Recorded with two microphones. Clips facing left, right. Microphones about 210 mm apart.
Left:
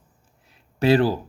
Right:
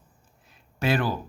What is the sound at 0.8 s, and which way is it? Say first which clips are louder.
Speech: left 7 dB; 35° left (ahead or behind).